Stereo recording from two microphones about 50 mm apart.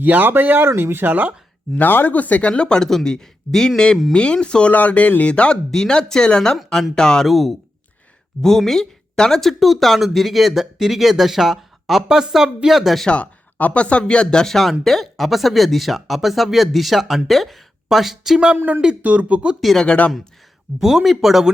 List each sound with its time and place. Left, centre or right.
0.0 s speech: right
1.7 s speech: left; by 4.7 s centre
4.7 s speech: left
5.3 s speech: left
7.3 s a woman's voice: centre
13.1 s a woman's voice: left; by 18.3 s centre
18.5 s speech: right
20.7 s speech: centre